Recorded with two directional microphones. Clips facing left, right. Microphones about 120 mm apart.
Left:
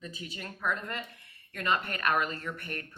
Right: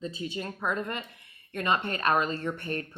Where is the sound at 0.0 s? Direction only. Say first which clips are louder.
Right 8 dB; 25° right (ahead or behind).